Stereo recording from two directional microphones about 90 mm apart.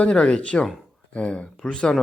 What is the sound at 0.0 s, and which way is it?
Speech, 10° left (ahead or behind).